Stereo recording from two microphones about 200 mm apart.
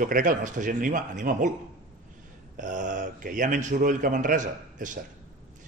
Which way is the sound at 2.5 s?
40° right (ahead or behind).